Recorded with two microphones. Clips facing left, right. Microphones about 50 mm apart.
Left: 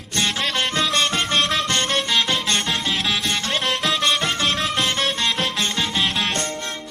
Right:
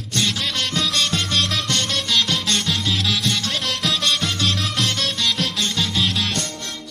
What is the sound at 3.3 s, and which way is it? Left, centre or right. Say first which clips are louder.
Music: even; left.